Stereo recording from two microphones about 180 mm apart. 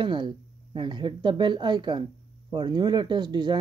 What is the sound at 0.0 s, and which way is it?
Speech, 25° right (ahead or behind).